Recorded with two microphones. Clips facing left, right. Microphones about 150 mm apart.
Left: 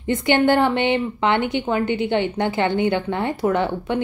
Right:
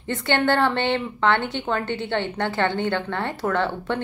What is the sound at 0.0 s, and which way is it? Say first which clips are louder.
A woman's voice: left 5 dB; 15° left (ahead or behind).